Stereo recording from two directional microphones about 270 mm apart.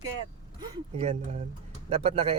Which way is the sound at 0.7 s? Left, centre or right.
Right.